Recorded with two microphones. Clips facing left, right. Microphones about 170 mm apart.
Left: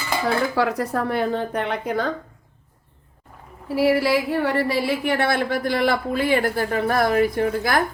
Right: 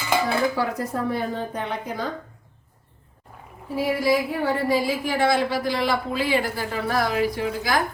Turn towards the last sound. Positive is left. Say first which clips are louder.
# left 3 dB
turn(degrees=55)  # may be behind; listen again after turning